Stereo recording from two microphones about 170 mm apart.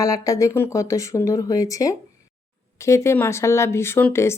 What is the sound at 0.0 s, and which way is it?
A woman's voice, 20° left (ahead or behind).